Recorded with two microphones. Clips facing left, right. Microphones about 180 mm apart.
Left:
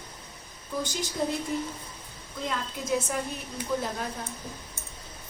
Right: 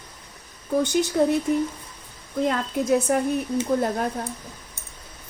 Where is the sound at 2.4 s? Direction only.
60° right (ahead or behind).